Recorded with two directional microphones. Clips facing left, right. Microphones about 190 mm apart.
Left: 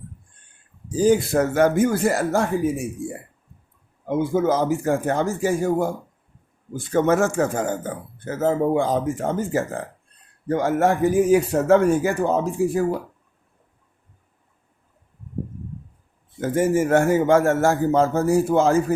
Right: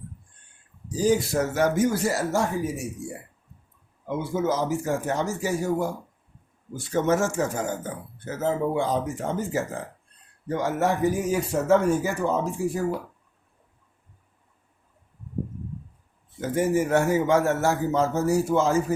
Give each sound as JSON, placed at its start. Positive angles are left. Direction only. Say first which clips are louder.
{"t": 0.9, "sound": "speech", "louder": "left 4 dB", "side_deg": 55}
{"t": 16.4, "sound": "speech", "louder": "left 3 dB", "side_deg": 50}